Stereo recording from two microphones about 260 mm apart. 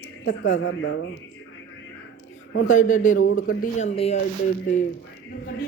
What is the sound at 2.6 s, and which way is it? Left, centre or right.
Speech, left.